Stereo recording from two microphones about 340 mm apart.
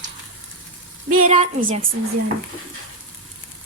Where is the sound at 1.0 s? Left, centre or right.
Right.